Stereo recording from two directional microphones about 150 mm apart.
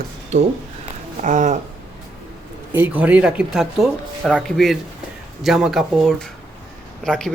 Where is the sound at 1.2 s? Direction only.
55° right (ahead or behind).